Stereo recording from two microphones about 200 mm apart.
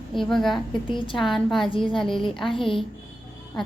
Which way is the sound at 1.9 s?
Centre (ahead or behind).